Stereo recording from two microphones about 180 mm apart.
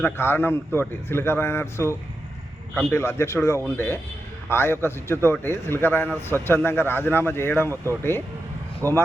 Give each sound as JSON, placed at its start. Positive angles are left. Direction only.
{"t": 0.0, "sound": "a man's voice", "side_deg": 10}
{"t": 8.8, "sound": "speech", "side_deg": -15}